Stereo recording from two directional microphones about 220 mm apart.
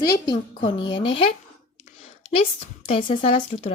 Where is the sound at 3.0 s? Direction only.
35° left (ahead or behind).